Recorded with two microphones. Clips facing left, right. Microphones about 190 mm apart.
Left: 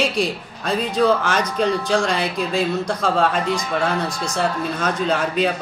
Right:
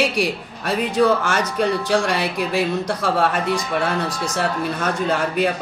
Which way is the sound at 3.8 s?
15° left (ahead or behind).